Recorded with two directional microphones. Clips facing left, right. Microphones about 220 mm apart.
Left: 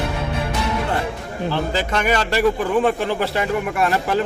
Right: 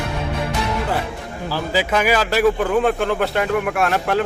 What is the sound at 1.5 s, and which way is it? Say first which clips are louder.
Speech: right 3 dB; 5° right (ahead or behind).